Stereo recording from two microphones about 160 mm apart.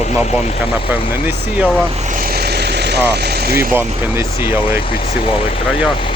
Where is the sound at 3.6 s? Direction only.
15° right (ahead or behind).